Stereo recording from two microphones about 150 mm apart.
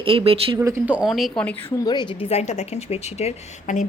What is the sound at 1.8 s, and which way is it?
Speech, 30° left (ahead or behind).